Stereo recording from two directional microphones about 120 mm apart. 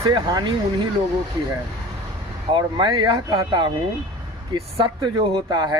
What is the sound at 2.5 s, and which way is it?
Speech, 40° right (ahead or behind).